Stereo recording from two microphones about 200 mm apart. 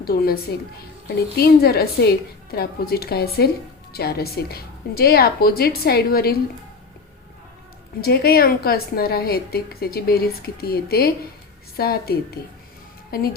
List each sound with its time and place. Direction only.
0.0 s a woman's voice: 50° left (ahead or behind)
1.4 s a woman's voice: 50° left (ahead or behind)
8.0 s a woman's voice: 50° left (ahead or behind)